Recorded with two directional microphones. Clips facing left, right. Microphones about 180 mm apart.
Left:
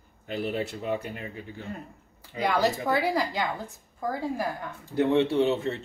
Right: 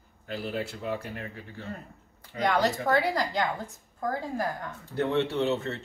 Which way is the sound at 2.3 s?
10° left (ahead or behind).